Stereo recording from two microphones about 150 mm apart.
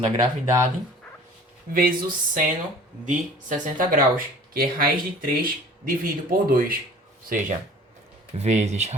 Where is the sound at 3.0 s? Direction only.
60° right (ahead or behind).